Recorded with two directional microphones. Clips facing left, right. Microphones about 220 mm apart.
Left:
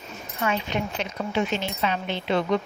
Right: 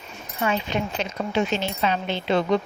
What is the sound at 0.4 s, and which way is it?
A woman's voice, 30° right (ahead or behind).